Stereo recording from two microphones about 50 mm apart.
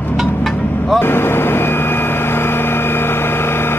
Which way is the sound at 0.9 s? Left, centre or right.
Left.